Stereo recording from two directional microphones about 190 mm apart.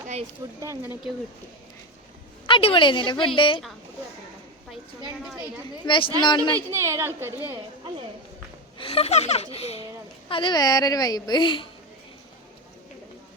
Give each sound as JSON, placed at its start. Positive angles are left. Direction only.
{"t": 0.6, "sound": "a woman's voice", "side_deg": -15}
{"t": 2.5, "sound": "a child's voice", "side_deg": 30}
{"t": 5.8, "sound": "a child's voice", "side_deg": 25}
{"t": 6.6, "sound": "a woman's voice", "side_deg": -15}
{"t": 8.8, "sound": "a child's voice", "side_deg": 30}